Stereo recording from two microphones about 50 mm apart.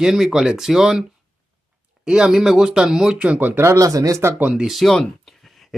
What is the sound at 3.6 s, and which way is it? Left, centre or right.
Speech, right.